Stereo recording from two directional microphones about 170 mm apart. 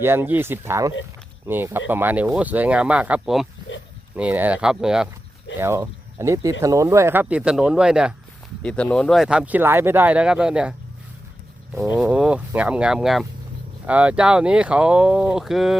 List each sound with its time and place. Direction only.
0.0 s speech: 15° right (ahead or behind)
5.5 s speech: 15° right (ahead or behind)
8.6 s speech: 5° left (ahead or behind)